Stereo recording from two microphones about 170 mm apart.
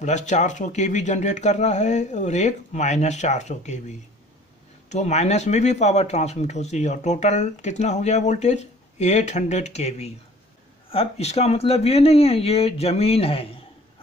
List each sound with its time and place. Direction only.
0.0 s speech: 45° left (ahead or behind)